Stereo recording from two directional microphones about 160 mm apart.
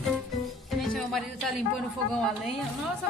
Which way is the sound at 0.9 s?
Centre (ahead or behind).